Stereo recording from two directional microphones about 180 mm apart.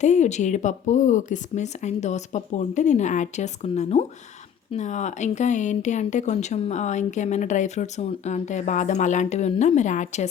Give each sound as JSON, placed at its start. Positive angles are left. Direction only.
{"t": 0.0, "sound": "speech", "side_deg": 40}